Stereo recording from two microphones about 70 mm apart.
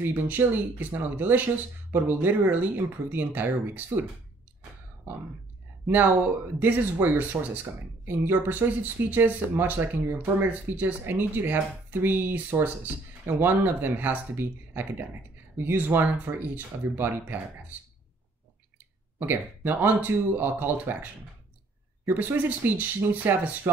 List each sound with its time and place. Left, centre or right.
0.0 s speech: right
6.6 s speech: right
19.1 s speech: right